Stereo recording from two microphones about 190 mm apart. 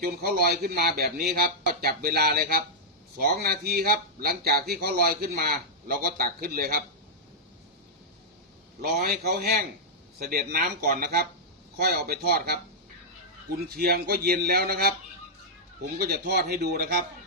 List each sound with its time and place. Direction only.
0.0 s a man's voice: 50° right (ahead or behind)
9.0 s a man's voice: 55° right (ahead or behind)
13.7 s a man's voice: 55° right (ahead or behind)
16.0 s a man's voice: 55° right (ahead or behind)